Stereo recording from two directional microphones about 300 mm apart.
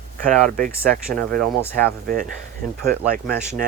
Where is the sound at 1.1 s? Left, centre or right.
Centre.